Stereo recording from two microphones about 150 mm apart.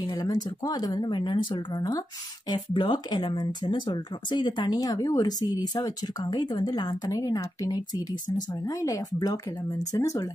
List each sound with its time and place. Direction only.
0.1 s speech: 25° left (ahead or behind)